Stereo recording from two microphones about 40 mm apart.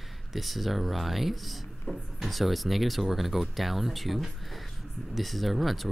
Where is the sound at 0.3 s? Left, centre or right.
Centre.